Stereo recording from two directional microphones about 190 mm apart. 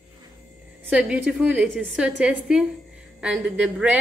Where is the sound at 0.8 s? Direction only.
5° right (ahead or behind).